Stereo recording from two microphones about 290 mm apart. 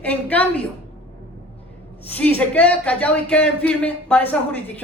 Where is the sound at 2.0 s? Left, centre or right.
Centre.